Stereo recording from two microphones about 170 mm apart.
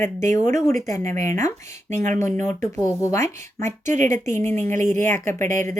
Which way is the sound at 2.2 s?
15° left (ahead or behind).